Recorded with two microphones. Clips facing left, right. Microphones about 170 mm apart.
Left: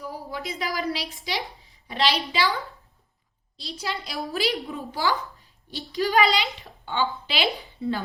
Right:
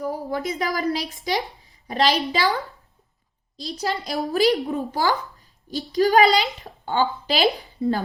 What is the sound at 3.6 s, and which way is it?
A woman's voice, 40° right (ahead or behind).